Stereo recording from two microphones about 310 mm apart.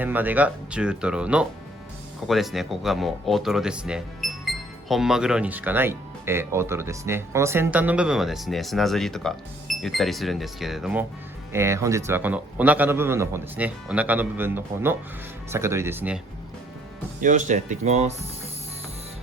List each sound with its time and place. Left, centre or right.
0.0 s a man's voice: centre
17.2 s speech: right